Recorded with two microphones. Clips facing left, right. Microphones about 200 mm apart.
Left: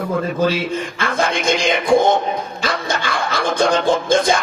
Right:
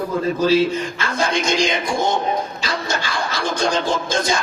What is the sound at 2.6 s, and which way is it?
Music, 55° left (ahead or behind).